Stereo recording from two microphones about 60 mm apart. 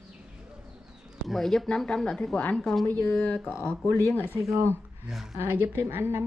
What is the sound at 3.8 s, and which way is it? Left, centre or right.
Speech, left.